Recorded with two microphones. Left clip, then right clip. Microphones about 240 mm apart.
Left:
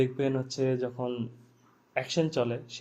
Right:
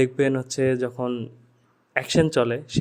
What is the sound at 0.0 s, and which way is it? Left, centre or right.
Speech, right.